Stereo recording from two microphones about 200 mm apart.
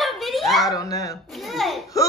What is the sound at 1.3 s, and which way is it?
Speech, centre (ahead or behind).